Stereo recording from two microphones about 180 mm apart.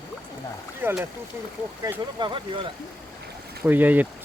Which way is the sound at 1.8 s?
25° right (ahead or behind).